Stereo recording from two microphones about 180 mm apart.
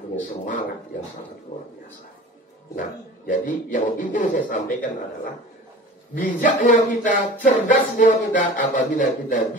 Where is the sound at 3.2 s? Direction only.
45° left (ahead or behind).